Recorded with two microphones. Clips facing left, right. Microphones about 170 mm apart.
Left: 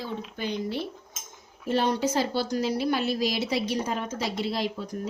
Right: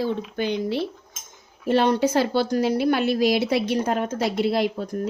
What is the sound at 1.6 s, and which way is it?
A woman's voice, 70° right (ahead or behind).